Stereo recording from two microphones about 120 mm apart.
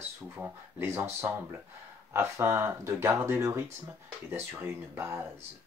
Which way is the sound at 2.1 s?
20° right (ahead or behind).